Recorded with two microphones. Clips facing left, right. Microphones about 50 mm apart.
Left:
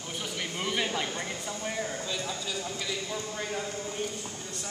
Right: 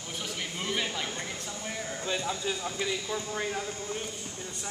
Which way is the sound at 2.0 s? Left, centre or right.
Right.